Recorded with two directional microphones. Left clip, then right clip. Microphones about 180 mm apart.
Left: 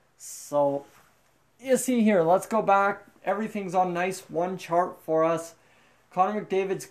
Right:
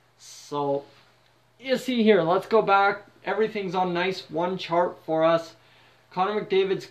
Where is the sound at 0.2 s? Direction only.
50° left (ahead or behind).